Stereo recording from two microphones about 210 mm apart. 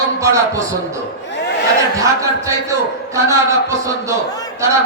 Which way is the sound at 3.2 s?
15° right (ahead or behind).